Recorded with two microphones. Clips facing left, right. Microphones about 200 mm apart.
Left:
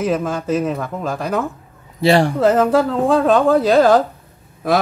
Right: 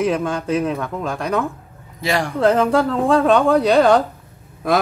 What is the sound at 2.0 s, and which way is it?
Speech, 30° left (ahead or behind).